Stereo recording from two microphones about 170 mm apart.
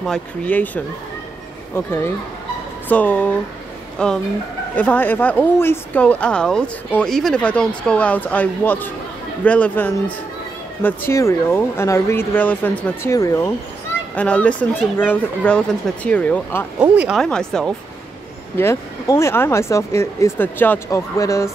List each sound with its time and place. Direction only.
0.0 s speech: 5° left (ahead or behind)
2.9 s speech: 10° left (ahead or behind)
14.1 s speech: 10° left (ahead or behind)
16.8 s speech: 10° right (ahead or behind)
17.2 s speech: 5° left (ahead or behind)
18.6 s speech: 15° left (ahead or behind)